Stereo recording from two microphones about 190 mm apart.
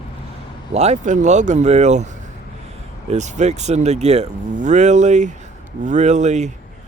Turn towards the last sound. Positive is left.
turn(degrees=-35)  # may be behind; listen again after turning